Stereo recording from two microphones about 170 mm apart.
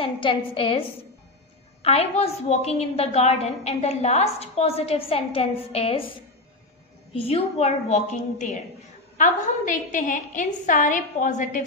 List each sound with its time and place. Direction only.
0.0 s a woman's voice: 30° left (ahead or behind)
7.2 s a woman's voice: 35° left (ahead or behind)